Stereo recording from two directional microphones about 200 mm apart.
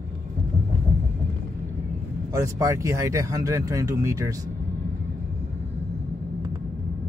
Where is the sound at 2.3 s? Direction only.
15° right (ahead or behind).